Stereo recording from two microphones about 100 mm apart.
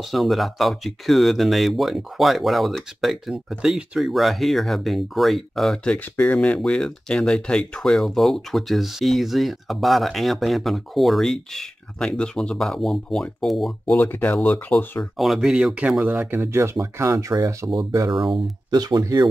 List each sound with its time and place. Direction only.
0.0 s speech: centre (ahead or behind)
5.9 s speech: 15° left (ahead or behind)
13.9 s speech: 20° left (ahead or behind)
15.0 s speech: centre (ahead or behind); by 19.2 s 35° right (ahead or behind)